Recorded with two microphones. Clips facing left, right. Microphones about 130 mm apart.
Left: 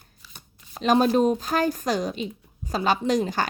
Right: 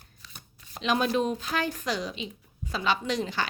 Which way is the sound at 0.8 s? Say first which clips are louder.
Left 7 dB; 40° left (ahead or behind).